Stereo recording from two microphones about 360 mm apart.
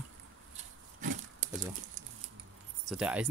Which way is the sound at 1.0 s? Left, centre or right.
Centre.